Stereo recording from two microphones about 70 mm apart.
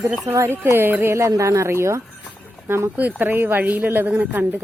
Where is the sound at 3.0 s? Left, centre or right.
Right.